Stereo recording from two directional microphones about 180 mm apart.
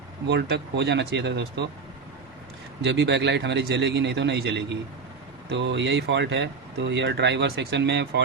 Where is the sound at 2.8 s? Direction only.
70° right (ahead or behind).